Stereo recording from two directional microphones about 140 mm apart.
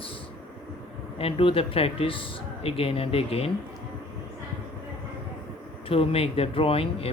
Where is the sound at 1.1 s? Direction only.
40° left (ahead or behind).